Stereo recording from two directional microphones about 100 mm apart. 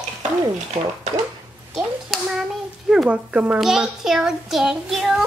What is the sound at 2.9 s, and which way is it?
Speech, 10° right (ahead or behind).